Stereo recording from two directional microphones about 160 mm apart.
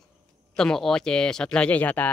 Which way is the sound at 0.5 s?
5° left (ahead or behind).